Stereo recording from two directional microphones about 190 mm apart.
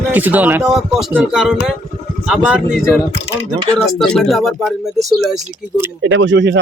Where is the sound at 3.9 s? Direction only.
5° left (ahead or behind).